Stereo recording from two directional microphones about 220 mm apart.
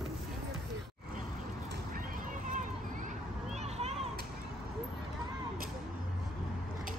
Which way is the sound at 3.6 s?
30° right (ahead or behind).